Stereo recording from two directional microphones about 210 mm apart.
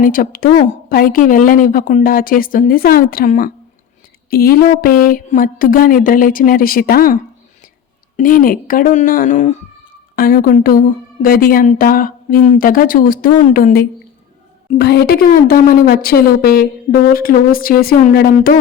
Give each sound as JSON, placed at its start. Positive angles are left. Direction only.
{"t": 0.0, "sound": "a woman's voice", "side_deg": 40}